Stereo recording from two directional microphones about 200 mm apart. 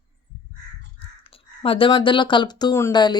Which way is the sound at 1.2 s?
25° left (ahead or behind).